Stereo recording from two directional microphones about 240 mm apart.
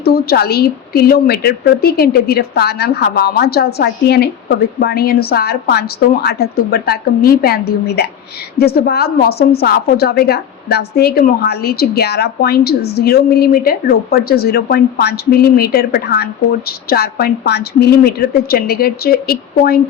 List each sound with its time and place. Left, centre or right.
0.0 s a woman's voice: left